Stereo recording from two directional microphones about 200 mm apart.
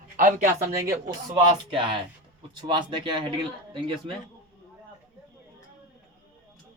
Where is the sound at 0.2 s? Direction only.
40° right (ahead or behind).